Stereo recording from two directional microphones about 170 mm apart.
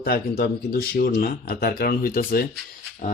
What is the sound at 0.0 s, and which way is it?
Speech, 65° left (ahead or behind).